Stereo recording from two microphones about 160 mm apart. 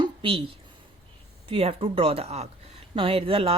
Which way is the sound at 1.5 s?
35° right (ahead or behind).